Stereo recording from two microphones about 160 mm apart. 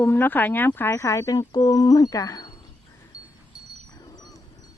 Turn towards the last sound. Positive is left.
turn(degrees=25)  # may be behind; listen again after turning